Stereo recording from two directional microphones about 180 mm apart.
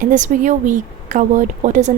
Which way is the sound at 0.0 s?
45° right (ahead or behind).